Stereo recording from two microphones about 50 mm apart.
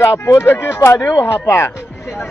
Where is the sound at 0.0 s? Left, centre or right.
Left.